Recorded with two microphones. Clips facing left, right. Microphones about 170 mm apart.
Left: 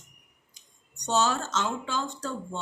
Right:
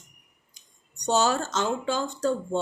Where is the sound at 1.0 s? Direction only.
35° right (ahead or behind).